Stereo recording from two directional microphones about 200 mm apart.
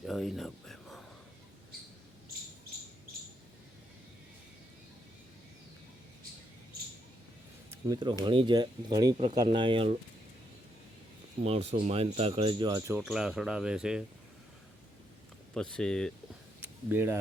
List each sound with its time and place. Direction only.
0.0 s a sound: centre (ahead or behind)
7.7 s a sound: 20° right (ahead or behind)
8.2 s speech: 25° right (ahead or behind)
11.4 s speech: 30° right (ahead or behind)
13.1 s speech: 5° right (ahead or behind)
15.5 s speech: 5° left (ahead or behind)
16.9 s speech: 10° right (ahead or behind)